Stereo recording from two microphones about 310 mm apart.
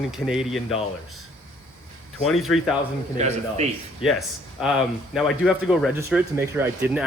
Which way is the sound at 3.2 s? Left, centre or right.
Right.